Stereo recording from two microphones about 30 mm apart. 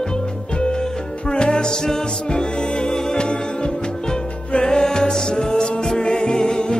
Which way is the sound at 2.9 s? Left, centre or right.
Centre.